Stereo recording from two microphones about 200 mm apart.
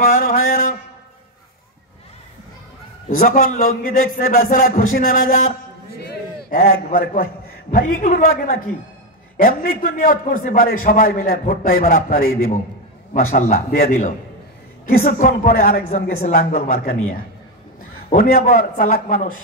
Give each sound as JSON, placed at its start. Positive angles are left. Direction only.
{"t": 0.1, "sound": "mantra", "side_deg": 45}
{"t": 3.2, "sound": "a man's voice", "side_deg": 40}
{"t": 6.5, "sound": "a man's voice", "side_deg": 45}
{"t": 15.0, "sound": "a man's voice", "side_deg": 40}